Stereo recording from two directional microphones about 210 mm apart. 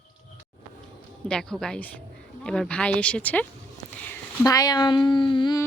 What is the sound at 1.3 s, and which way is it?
Speech, 5° left (ahead or behind).